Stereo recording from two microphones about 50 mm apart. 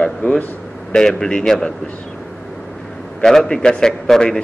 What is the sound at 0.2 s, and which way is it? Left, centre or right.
Speech, left.